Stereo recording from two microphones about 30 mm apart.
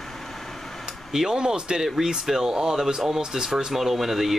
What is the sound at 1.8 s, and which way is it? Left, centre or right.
Speech, centre.